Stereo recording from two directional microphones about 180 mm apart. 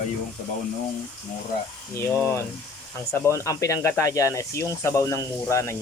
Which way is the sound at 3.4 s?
15° left (ahead or behind).